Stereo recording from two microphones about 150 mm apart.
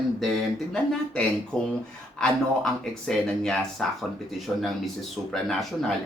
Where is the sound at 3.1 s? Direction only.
5° left (ahead or behind).